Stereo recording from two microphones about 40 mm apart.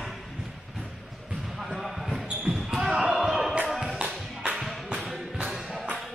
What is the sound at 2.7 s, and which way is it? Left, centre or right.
Slam, centre.